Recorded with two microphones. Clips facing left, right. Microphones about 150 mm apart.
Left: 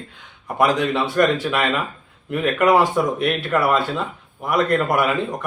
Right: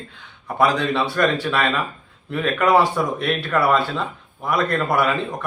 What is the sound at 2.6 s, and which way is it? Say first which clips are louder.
Speech: left 1 dB; centre (ahead or behind).